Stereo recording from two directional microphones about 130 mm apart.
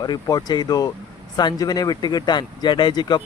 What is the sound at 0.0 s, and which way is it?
Speech, 30° left (ahead or behind).